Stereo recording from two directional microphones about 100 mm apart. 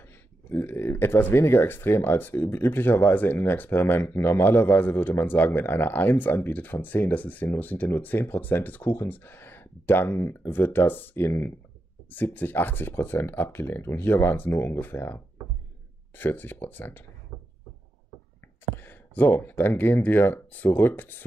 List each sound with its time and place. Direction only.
0.5 s speech: 25° left (ahead or behind)
18.8 s speech: 20° left (ahead or behind)